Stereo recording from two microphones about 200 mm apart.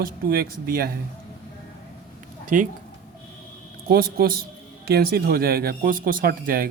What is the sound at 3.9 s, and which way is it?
Speech, 50° right (ahead or behind).